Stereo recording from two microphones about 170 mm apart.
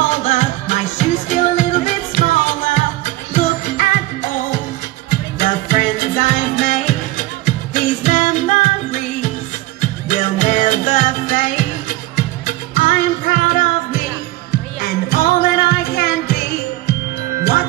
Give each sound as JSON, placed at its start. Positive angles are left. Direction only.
{"t": 0.1, "sound": "music", "side_deg": 45}
{"t": 14.8, "sound": "music", "side_deg": 60}